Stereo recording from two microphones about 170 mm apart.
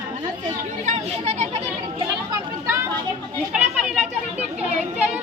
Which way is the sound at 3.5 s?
5° right (ahead or behind).